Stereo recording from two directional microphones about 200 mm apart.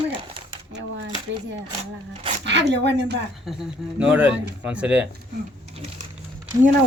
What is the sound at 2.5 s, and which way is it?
Speech, 60° right (ahead or behind).